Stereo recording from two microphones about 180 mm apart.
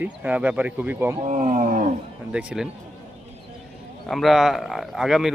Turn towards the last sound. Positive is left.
turn(degrees=0)  # may be behind; listen again after turning